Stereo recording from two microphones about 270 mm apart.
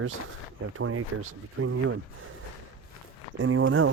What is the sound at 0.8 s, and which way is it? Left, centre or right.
Speech, right.